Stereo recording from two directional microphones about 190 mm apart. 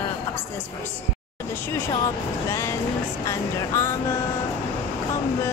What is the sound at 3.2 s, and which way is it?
Speech, 15° left (ahead or behind).